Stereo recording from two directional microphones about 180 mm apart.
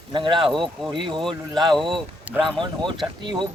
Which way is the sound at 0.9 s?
25° right (ahead or behind).